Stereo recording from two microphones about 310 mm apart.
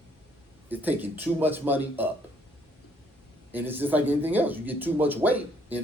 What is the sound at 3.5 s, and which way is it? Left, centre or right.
Speech, centre.